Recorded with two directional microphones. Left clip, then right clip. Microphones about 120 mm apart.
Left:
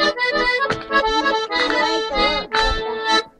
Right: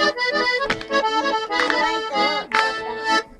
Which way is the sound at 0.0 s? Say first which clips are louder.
Left 2 dB; 45° right (ahead or behind).